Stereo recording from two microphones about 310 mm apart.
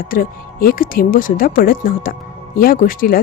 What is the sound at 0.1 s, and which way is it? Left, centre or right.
Speech, left.